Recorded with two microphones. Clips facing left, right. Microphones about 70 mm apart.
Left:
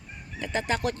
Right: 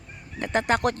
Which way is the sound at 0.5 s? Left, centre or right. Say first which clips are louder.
Right 5 dB; right.